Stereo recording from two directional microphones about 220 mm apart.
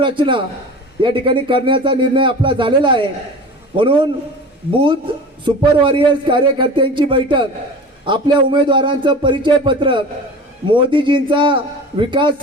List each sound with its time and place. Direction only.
0.0 s a man's voice: 20° right (ahead or behind)
5.5 s a man's voice: 20° right (ahead or behind)